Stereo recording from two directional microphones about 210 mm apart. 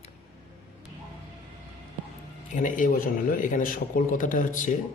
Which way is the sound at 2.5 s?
35° left (ahead or behind).